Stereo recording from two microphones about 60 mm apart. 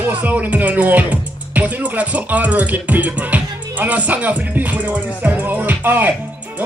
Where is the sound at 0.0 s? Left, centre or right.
Right.